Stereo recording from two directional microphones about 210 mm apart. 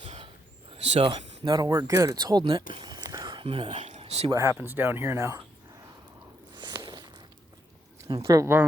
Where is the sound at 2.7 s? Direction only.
20° right (ahead or behind).